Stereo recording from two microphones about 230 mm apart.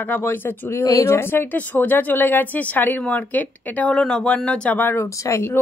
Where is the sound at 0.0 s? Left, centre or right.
Centre.